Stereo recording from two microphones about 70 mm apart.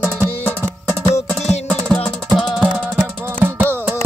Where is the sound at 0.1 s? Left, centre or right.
Left.